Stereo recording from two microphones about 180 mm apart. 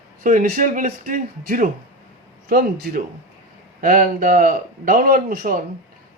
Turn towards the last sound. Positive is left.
turn(degrees=-50)  # may be behind; listen again after turning